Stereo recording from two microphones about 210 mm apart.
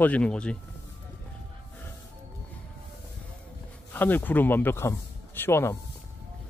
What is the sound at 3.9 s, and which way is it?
Speech, 10° left (ahead or behind).